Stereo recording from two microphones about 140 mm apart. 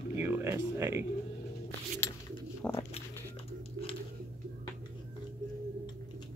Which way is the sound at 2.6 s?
10° left (ahead or behind).